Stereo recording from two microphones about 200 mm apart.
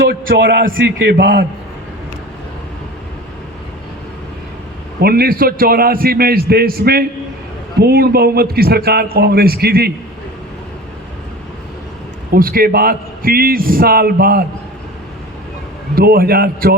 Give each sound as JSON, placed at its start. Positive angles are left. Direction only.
{"t": 0.1, "sound": "a man's voice", "side_deg": -55}
{"t": 4.9, "sound": "a man's voice", "side_deg": -50}
{"t": 12.3, "sound": "a man's voice", "side_deg": -45}
{"t": 16.0, "sound": "a man's voice", "side_deg": -50}